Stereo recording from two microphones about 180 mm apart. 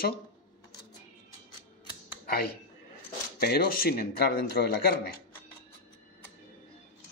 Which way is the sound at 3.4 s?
55° left (ahead or behind).